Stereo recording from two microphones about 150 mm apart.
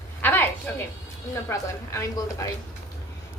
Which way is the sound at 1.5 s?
20° left (ahead or behind).